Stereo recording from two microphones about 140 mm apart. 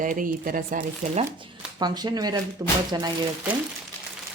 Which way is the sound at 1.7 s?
30° right (ahead or behind).